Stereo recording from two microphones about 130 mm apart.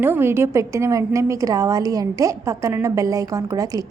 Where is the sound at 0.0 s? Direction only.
15° right (ahead or behind).